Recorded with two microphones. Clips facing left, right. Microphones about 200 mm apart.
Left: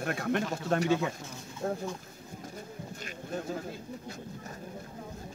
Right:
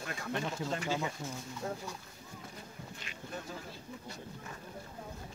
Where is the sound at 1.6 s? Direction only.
45° left (ahead or behind).